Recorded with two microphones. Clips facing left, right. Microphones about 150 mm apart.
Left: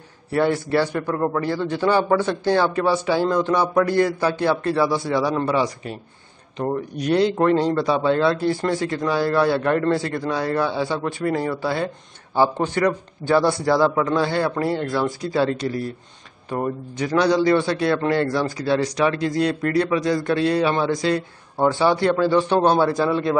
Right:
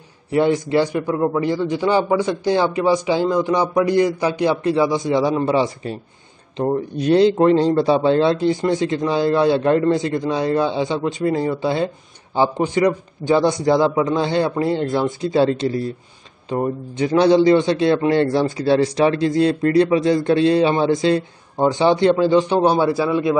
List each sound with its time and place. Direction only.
0.3 s a man's voice: 15° right (ahead or behind)